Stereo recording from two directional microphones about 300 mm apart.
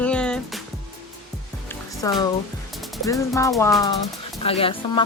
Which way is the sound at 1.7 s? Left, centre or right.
Centre.